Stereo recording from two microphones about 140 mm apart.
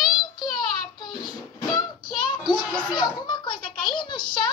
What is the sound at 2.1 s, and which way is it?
Child singing, 35° left (ahead or behind).